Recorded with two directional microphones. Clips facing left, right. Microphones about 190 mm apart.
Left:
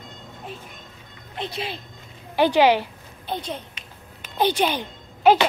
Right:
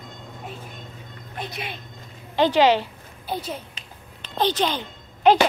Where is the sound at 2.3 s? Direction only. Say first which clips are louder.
Even; 10° left (ahead or behind).